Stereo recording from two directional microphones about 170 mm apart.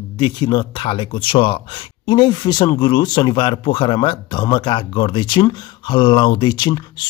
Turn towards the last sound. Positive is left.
turn(degrees=25)  # may be behind; listen again after turning